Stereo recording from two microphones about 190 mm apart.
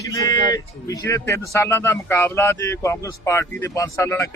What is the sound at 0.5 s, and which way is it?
Speech, 20° left (ahead or behind).